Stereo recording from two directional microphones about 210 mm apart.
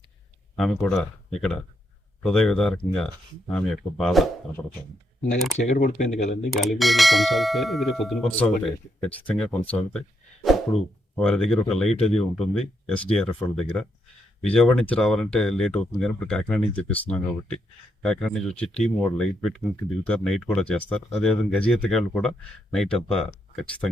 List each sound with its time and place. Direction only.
0.5 s speech: centre (ahead or behind)
5.5 s speech: 40° left (ahead or behind)
6.5 s speech: centre (ahead or behind)
10.4 s a sound: centre (ahead or behind)
11.1 s speech: 5° left (ahead or behind)